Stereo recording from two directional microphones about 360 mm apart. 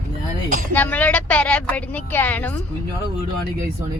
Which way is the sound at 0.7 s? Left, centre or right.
Centre.